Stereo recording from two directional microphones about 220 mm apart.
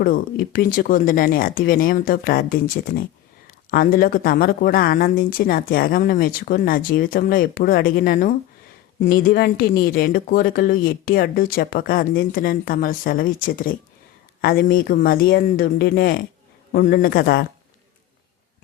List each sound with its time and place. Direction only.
0.0 s speech: 40° left (ahead or behind)